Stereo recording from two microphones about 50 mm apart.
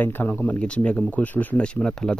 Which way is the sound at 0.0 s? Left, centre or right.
Left.